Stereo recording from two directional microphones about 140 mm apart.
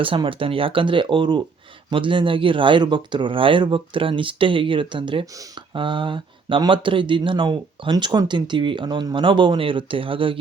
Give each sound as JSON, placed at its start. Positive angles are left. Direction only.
{"t": 0.0, "sound": "speech", "side_deg": -40}
{"t": 5.2, "sound": "speech", "side_deg": -25}
{"t": 5.7, "sound": "speech", "side_deg": -35}